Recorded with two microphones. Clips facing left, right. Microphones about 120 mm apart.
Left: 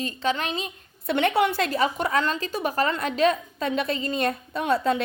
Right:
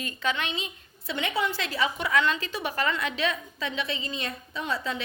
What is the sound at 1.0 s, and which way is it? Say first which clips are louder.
A woman's voice: left 7 dB; 60° left (ahead or behind).